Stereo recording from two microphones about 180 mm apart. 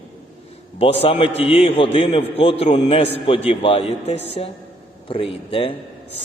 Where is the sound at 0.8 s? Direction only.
35° left (ahead or behind).